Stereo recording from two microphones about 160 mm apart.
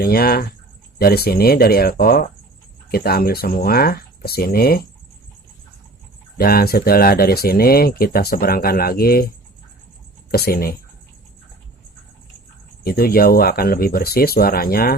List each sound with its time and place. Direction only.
0.0 s speech: 70° left (ahead or behind)
6.3 s speech: 70° left (ahead or behind)
10.3 s speech: 70° left (ahead or behind)
12.8 s speech: 70° left (ahead or behind)